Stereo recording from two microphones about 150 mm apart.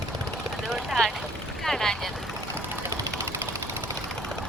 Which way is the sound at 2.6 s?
15° right (ahead or behind).